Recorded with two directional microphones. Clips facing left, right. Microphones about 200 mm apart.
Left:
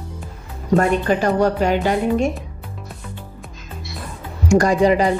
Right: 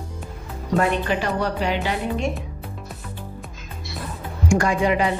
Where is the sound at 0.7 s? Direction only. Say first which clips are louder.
Left 4 dB; 45° left (ahead or behind).